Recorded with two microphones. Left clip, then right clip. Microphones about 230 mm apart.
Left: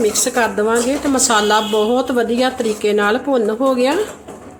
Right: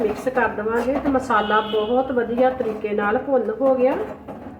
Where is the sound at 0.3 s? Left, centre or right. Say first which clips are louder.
Left 5 dB; left.